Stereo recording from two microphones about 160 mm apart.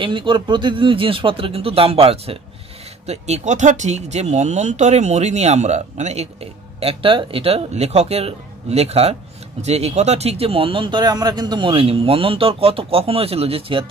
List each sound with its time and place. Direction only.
0.0 s speech: 30° right (ahead or behind)